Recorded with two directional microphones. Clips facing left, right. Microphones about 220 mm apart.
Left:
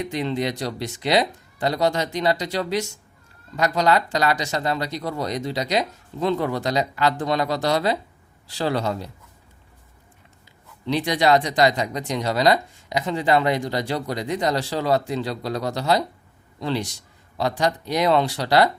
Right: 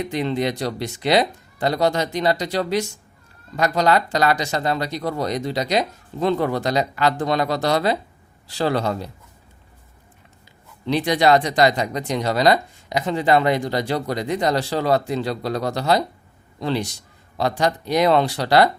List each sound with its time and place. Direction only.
0.1 s speech: 55° right (ahead or behind)
10.8 s speech: 55° right (ahead or behind)